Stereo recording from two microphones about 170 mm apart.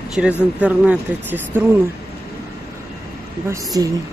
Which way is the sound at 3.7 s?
20° right (ahead or behind).